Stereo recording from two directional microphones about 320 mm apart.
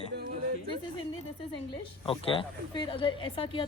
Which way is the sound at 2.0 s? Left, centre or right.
Centre.